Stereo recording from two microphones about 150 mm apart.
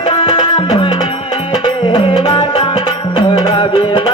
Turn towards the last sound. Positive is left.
turn(degrees=35)  # may be behind; listen again after turning